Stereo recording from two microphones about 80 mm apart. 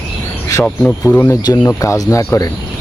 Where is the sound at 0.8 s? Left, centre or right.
Centre.